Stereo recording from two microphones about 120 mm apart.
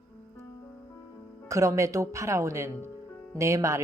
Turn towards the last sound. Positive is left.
turn(degrees=-25)  # may be behind; listen again after turning